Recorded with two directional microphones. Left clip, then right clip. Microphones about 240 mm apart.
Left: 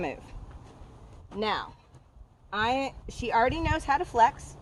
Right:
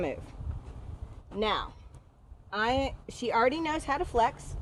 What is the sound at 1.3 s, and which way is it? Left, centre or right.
A woman's voice, centre.